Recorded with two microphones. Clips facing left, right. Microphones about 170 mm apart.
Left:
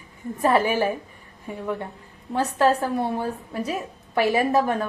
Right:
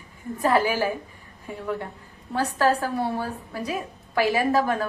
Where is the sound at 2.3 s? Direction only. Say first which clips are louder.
Left 2 dB; 20° left (ahead or behind).